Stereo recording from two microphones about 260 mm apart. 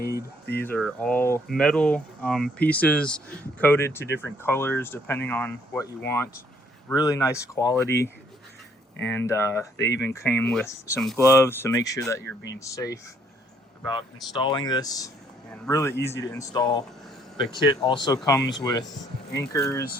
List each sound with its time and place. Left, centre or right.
0.6 s speech: centre
17.8 s speech: centre